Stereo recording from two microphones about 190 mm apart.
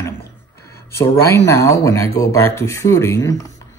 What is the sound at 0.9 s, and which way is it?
Speech, 15° left (ahead or behind).